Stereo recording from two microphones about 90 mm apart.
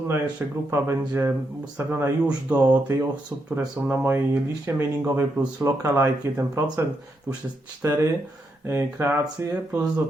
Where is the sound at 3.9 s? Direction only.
25° right (ahead or behind).